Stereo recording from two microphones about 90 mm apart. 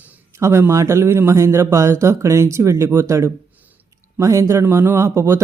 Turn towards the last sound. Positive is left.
turn(degrees=-35)  # may be behind; listen again after turning